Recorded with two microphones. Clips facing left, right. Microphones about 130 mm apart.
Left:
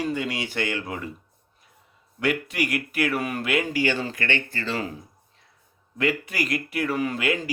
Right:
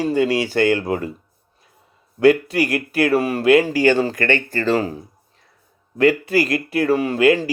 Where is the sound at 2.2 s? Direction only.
35° right (ahead or behind).